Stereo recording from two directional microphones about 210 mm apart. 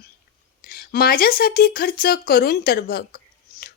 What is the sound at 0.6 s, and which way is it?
A woman's voice, 45° left (ahead or behind).